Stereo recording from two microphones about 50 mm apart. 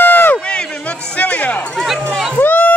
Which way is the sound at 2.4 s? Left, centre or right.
Left.